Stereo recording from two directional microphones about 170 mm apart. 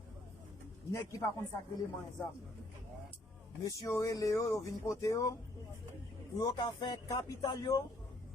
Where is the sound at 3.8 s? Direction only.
20° left (ahead or behind).